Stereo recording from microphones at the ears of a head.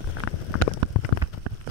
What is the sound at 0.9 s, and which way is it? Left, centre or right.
Rain on surface, left.